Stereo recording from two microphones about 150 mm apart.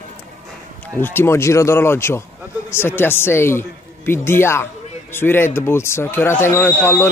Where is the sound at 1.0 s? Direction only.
15° left (ahead or behind).